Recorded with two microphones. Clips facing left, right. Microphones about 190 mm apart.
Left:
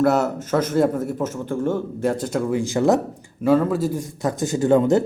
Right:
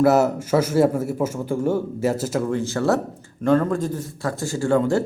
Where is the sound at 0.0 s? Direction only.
5° right (ahead or behind).